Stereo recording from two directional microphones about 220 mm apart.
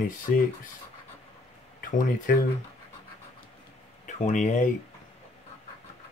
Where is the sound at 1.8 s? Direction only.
40° left (ahead or behind).